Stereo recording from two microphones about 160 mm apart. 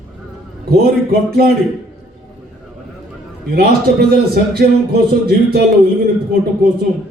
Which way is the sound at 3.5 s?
70° right (ahead or behind).